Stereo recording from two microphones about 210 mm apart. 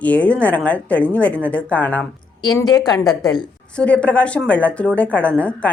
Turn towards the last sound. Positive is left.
turn(degrees=5)  # may be behind; listen again after turning